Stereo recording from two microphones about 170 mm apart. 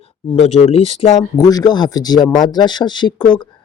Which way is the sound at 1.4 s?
20° left (ahead or behind).